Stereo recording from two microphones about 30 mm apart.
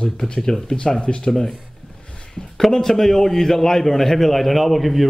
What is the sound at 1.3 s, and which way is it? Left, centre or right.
Speech, centre.